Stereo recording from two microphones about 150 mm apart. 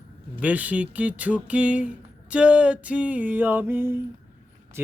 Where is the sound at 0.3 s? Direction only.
10° right (ahead or behind).